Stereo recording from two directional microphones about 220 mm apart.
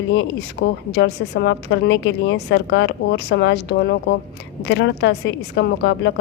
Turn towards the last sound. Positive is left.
turn(degrees=55)  # may be behind; listen again after turning